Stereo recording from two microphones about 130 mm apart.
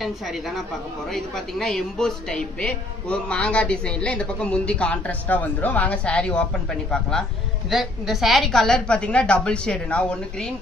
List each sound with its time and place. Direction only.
1.1 s a man's voice: 5° left (ahead or behind)